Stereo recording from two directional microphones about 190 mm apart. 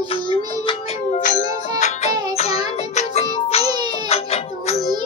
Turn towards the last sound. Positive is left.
turn(degrees=35)  # may be behind; listen again after turning